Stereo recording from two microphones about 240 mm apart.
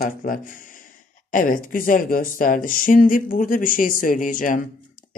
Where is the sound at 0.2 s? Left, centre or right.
Left.